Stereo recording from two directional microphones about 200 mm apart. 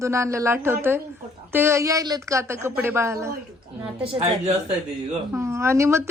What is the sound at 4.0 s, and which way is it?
Speech, 30° right (ahead or behind).